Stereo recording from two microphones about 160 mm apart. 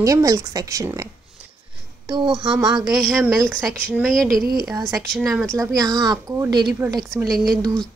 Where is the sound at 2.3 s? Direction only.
Centre (ahead or behind).